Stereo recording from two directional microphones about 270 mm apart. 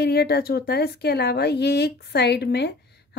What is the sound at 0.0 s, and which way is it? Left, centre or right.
Speech, left.